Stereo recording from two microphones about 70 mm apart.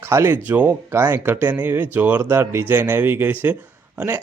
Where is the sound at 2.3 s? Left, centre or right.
Right.